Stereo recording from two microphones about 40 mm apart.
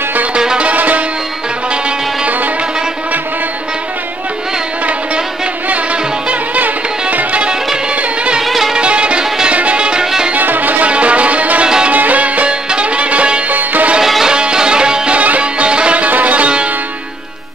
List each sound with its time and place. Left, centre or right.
0.6 s music: right
6.5 s music: right
8.4 s music: centre
8.7 s music: right
10.3 s music: right
10.9 s music: right
11.6 s music: right
11.9 s music: right
13.5 s music: right
14.2 s music: right
15.1 s music: right
16.1 s music: right